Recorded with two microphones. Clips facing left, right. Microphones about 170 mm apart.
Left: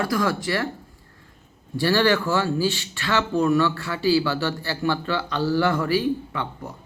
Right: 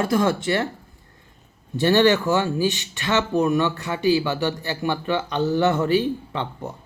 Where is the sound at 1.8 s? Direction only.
20° right (ahead or behind).